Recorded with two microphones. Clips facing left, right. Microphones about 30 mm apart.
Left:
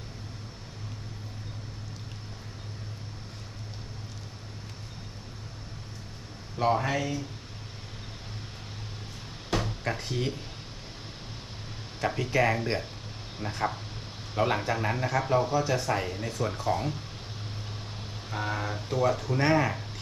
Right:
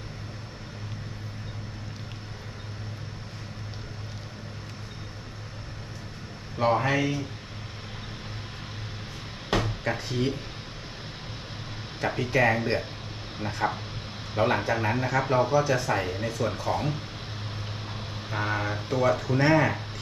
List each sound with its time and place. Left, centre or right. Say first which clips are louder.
6.6 s speech: right 3 dB; right
9.5 s a sound: right 3 dB; right
10.0 s speech: right 3 dB; centre
11.9 s speech: right 2 dB; right
15.6 s speech: right 3 dB; centre
15.9 s speech: right 2 dB; right
19.4 s speech: right 3 dB; centre